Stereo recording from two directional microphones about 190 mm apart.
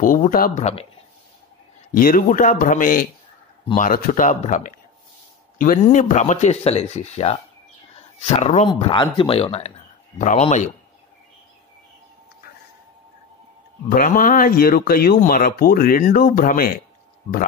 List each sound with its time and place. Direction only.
0.0 s speech: 45° left (ahead or behind)
1.9 s speech: 45° left (ahead or behind)
13.8 s speech: 45° left (ahead or behind)